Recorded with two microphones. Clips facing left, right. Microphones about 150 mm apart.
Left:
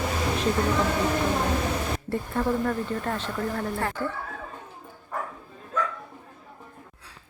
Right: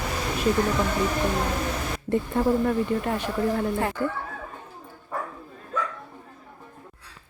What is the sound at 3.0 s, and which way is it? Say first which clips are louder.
Speech: right 4 dB; 10° right (ahead or behind).